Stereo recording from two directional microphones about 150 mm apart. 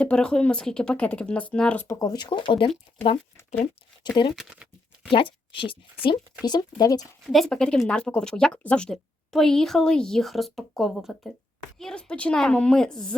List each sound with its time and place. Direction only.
0.0 s speech: 5° left (ahead or behind)
2.0 s speech: 25° left (ahead or behind)
3.3 s speech: 10° left (ahead or behind)
4.0 s speech: 30° left (ahead or behind)
4.4 s speech: 5° right (ahead or behind)
5.1 s a woman's voice: 35° left (ahead or behind)
7.3 s speech: centre (ahead or behind)